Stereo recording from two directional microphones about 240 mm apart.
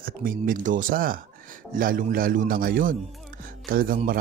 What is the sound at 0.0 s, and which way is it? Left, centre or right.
Speech, right.